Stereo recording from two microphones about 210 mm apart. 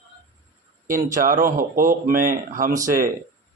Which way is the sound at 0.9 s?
40° right (ahead or behind).